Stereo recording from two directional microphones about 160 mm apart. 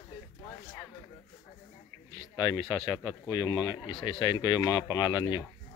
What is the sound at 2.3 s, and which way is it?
Speech, 25° left (ahead or behind).